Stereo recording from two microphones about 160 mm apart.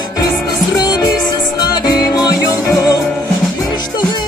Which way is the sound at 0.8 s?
25° left (ahead or behind).